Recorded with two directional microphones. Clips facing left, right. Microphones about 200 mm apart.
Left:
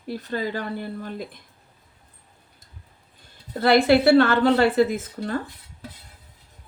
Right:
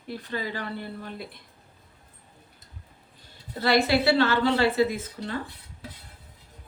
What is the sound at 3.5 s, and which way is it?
A woman's voice, 55° left (ahead or behind).